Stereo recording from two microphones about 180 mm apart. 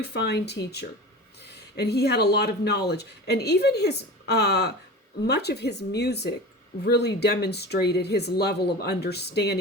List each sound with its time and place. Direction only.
0.0 s speech: 65° left (ahead or behind)